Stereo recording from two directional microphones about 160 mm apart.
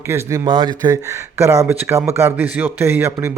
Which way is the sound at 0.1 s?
20° right (ahead or behind).